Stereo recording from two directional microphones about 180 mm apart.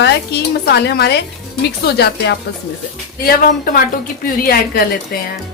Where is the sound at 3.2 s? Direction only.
55° left (ahead or behind).